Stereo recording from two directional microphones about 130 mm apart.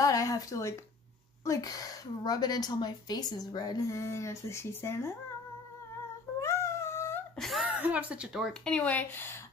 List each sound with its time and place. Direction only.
0.0 s a woman's voice: 25° left (ahead or behind)
6.4 s cat: 20° left (ahead or behind)
7.3 s speech: centre (ahead or behind)
7.7 s speech: 10° right (ahead or behind)
8.6 s speech: 10° left (ahead or behind)